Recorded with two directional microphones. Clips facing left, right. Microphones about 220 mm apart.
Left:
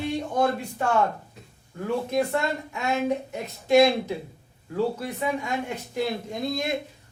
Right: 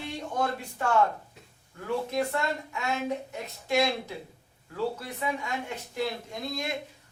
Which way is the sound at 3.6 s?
20° left (ahead or behind).